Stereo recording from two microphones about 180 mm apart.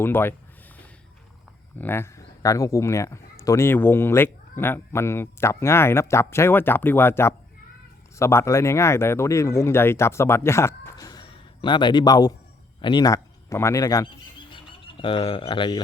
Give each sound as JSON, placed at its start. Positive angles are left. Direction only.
{"t": 0.0, "sound": "speech", "side_deg": 10}
{"t": 1.8, "sound": "speech", "side_deg": 15}
{"t": 14.5, "sound": "a sound", "side_deg": 30}